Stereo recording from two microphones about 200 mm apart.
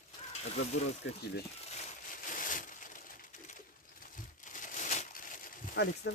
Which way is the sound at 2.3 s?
40° left (ahead or behind).